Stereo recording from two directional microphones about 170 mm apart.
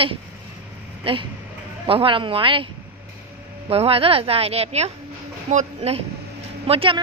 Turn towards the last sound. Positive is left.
turn(degrees=-35)  # may be behind; listen again after turning